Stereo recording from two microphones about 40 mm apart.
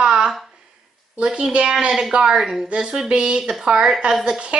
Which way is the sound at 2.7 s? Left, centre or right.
Right.